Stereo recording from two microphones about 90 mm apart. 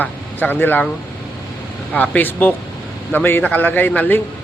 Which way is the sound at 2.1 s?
20° left (ahead or behind).